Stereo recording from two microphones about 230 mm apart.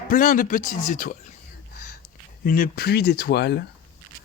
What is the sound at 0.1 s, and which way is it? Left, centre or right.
Speech, left.